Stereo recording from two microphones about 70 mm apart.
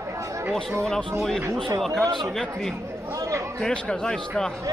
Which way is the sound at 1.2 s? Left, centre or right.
Centre.